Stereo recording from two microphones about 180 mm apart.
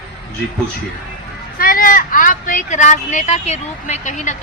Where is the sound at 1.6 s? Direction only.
50° left (ahead or behind).